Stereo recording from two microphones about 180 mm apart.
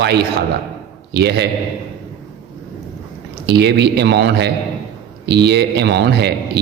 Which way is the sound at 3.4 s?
70° right (ahead or behind).